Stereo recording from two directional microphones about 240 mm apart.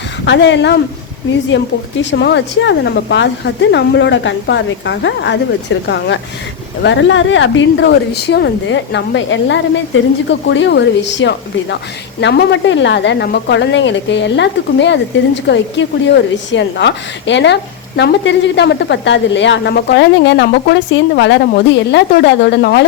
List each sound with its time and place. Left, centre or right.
0.3 s a woman's voice: left
6.8 s a woman's voice: left